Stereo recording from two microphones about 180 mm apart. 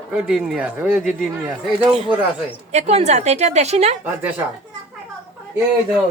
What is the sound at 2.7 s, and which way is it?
A woman's voice, 35° right (ahead or behind).